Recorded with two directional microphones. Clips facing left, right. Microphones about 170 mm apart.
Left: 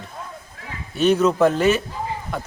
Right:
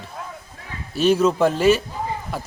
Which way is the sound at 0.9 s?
Centre (ahead or behind).